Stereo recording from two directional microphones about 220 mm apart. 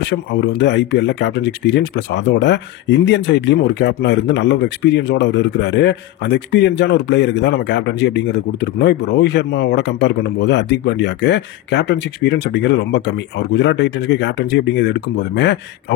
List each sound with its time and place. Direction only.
0.0 s speech: 50° left (ahead or behind)